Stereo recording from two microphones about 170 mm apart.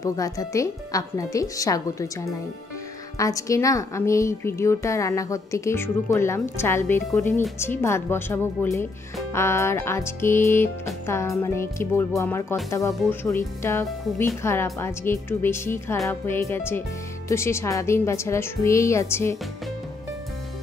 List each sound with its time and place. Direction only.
0.0 s a woman's voice: 20° left (ahead or behind)